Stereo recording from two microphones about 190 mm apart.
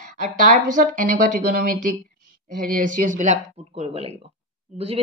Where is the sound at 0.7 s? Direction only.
45° right (ahead or behind).